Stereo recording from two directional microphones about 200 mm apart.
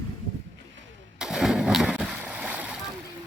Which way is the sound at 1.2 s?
Centre (ahead or behind).